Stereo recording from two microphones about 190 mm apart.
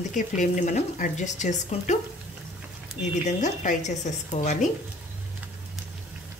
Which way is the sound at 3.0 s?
40° left (ahead or behind).